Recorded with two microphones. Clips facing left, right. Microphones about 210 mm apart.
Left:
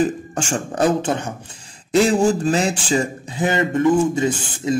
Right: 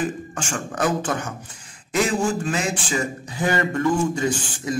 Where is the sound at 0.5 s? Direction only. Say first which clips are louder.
Left 5 dB; 30° left (ahead or behind).